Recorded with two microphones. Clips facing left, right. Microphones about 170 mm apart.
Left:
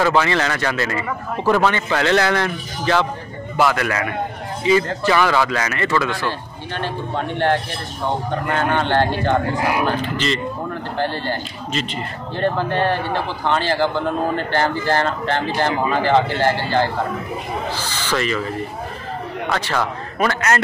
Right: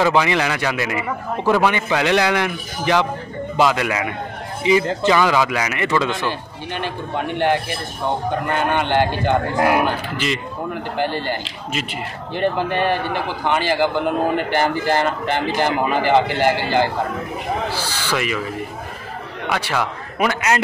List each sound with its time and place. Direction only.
0.0 s a man's voice: 15° right (ahead or behind)
19.5 s a man's voice: 10° right (ahead or behind)